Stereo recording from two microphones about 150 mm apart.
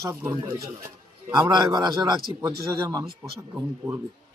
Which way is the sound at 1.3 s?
30° right (ahead or behind).